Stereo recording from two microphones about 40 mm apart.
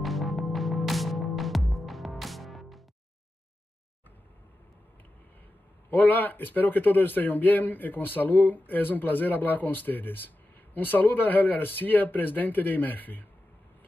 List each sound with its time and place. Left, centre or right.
0.0 s music: centre
5.9 s speech: left